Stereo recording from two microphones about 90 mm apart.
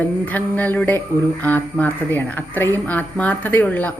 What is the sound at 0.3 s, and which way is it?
A woman's voice, 20° left (ahead or behind).